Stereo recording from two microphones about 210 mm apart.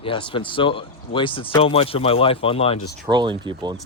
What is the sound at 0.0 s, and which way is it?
Speech, 25° left (ahead or behind).